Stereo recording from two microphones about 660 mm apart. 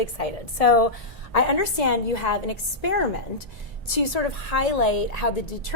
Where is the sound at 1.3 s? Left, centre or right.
Left.